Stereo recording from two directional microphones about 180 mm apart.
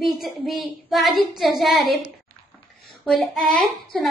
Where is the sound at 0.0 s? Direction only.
Centre (ahead or behind).